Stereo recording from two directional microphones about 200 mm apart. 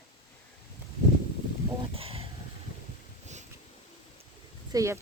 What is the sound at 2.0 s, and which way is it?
Speech, 30° right (ahead or behind).